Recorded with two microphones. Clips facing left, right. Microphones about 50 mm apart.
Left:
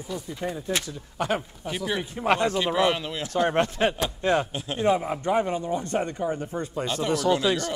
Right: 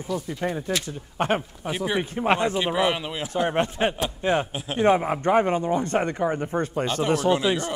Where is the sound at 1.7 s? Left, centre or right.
Centre.